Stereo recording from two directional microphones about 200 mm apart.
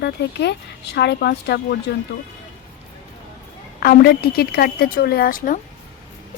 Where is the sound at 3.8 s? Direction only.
50° left (ahead or behind).